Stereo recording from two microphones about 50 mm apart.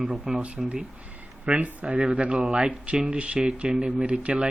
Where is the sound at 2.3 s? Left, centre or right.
Centre.